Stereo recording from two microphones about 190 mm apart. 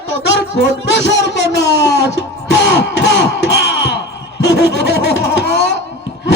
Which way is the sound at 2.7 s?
65° left (ahead or behind).